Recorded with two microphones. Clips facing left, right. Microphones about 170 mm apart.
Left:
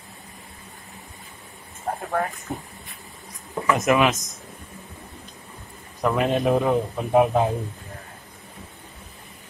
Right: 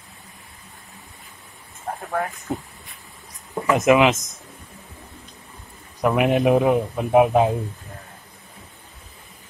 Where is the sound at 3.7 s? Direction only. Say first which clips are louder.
Right 4 dB; 20° right (ahead or behind).